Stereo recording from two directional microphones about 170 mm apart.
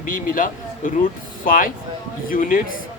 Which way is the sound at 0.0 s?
50° left (ahead or behind).